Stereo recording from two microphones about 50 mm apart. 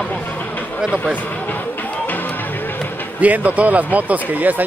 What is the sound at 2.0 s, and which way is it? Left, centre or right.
Music, left.